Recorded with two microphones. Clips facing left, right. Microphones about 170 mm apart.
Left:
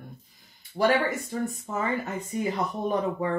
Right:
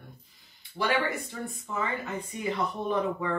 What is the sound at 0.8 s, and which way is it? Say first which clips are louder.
Speech: left 5 dB; 35° left (ahead or behind).